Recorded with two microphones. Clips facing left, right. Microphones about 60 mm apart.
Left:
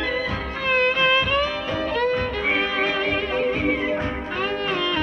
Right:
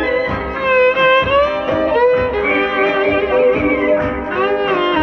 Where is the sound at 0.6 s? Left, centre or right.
Right.